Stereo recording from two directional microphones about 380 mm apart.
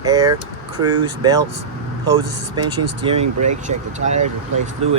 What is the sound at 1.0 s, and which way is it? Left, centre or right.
Speech, centre.